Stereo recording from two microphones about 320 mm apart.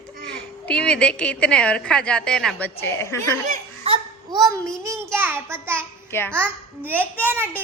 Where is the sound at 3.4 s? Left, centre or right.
Right.